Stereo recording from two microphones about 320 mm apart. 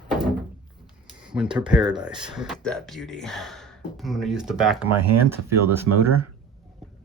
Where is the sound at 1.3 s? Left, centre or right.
Centre.